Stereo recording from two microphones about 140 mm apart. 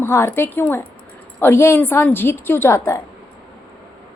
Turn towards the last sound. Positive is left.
turn(degrees=20)  # may be behind; listen again after turning